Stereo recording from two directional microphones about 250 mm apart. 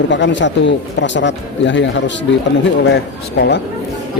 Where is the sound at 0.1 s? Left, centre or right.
Left.